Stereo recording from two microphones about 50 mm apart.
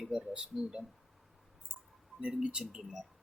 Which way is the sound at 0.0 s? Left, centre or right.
Centre.